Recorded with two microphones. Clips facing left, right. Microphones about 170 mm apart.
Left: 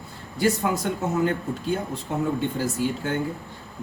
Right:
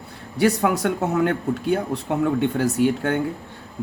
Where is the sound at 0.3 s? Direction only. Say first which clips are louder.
Right 4 dB; 70° right (ahead or behind).